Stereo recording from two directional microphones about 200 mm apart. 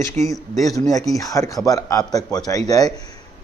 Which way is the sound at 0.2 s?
5° left (ahead or behind).